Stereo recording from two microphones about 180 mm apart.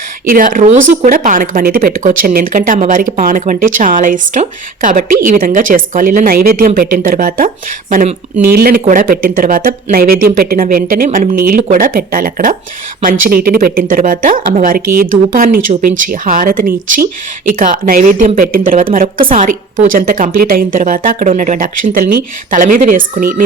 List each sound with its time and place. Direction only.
0.3 s speech: 50° right (ahead or behind)
19.2 s speech: 35° right (ahead or behind)